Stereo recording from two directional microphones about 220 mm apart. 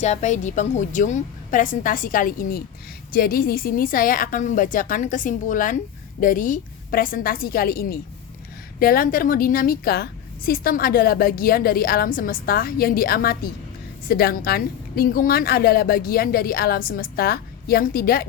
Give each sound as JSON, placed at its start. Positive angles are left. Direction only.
{"t": 0.0, "sound": "a woman's voice", "side_deg": 30}